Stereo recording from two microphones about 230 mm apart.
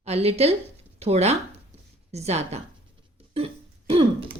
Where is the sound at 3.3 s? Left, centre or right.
Right.